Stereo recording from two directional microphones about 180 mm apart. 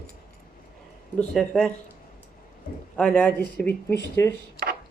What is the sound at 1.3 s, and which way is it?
Speech, 5° left (ahead or behind).